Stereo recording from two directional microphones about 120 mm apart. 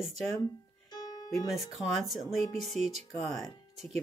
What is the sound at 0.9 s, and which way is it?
Music, 35° left (ahead or behind).